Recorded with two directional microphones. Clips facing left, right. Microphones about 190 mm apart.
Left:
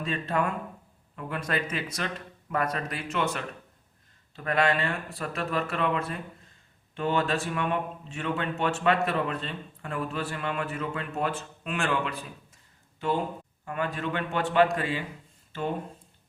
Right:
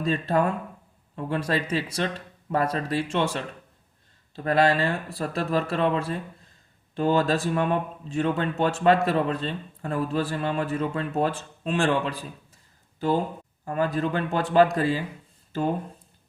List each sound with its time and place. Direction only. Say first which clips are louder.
0.0 s speech: right 5 dB; 35° right (ahead or behind)